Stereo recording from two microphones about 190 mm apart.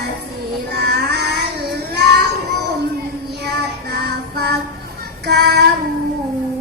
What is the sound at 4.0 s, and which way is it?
Music, 55° right (ahead or behind).